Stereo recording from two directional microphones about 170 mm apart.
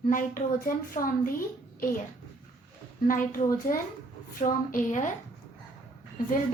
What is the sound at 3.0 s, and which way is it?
A woman's voice, 55° left (ahead or behind).